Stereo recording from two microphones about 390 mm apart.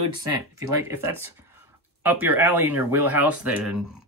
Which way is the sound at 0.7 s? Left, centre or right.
Centre.